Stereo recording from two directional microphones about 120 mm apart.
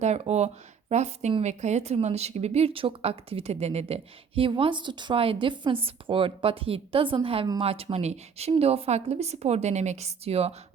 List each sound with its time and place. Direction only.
0.0 s speech: 65° right (ahead or behind)